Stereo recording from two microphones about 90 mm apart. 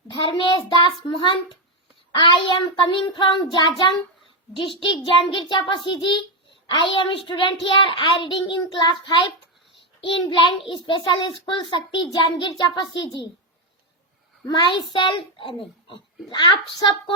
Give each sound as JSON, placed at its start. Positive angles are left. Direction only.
{"t": 0.1, "sound": "a child's voice", "side_deg": 60}
{"t": 4.5, "sound": "a child's voice", "side_deg": 70}
{"t": 14.4, "sound": "a child's voice", "side_deg": 55}